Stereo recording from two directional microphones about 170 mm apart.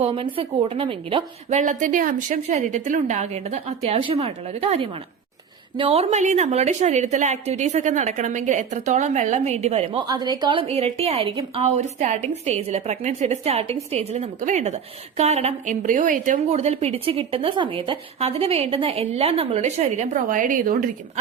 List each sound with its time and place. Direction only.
0.0 s a woman's voice: 35° right (ahead or behind)
1.5 s a woman's voice: 50° right (ahead or behind)
10.0 s a woman's voice: 25° right (ahead or behind); by 20.9 s 50° right (ahead or behind)